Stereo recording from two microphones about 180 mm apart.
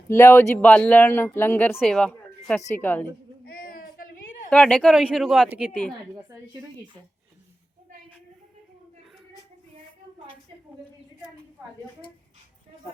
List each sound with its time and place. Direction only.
0.1 s speech: 15° left (ahead or behind)
3.4 s a sound: 55° left (ahead or behind)
4.4 s speech: 5° left (ahead or behind)
6.2 s speech: 20° right (ahead or behind)